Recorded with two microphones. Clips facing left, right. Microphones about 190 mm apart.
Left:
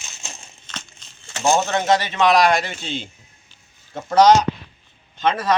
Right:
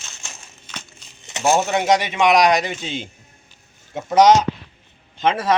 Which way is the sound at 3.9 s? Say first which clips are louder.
Even; 20° right (ahead or behind).